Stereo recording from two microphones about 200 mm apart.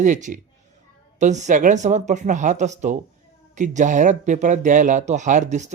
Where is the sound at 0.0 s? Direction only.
40° right (ahead or behind).